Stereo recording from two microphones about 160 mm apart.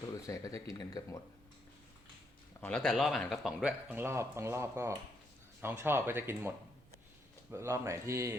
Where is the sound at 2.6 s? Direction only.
5° left (ahead or behind).